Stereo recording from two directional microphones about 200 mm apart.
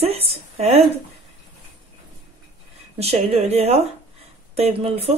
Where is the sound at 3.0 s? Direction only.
30° right (ahead or behind).